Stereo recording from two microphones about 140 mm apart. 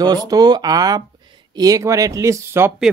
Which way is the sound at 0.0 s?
30° right (ahead or behind).